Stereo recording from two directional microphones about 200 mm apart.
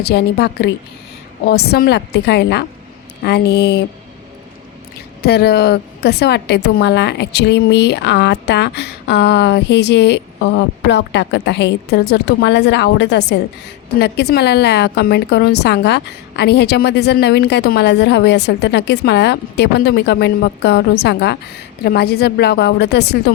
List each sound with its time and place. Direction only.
0.0 s a woman's voice: 55° left (ahead or behind)
5.2 s a woman's voice: 55° left (ahead or behind)